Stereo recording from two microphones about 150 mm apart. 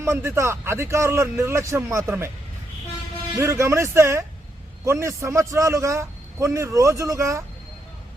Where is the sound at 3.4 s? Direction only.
20° right (ahead or behind).